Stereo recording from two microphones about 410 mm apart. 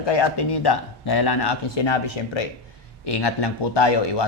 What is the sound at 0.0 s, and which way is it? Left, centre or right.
Speech, left.